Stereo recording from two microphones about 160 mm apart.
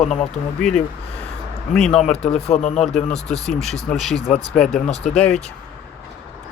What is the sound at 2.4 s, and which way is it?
Speech, 45° left (ahead or behind).